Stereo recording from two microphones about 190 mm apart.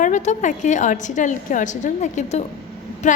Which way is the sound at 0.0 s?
40° left (ahead or behind).